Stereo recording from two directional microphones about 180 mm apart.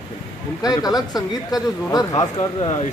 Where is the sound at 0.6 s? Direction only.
20° left (ahead or behind).